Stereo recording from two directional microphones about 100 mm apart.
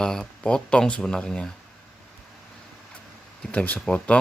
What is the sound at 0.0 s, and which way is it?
Speech, 5° left (ahead or behind).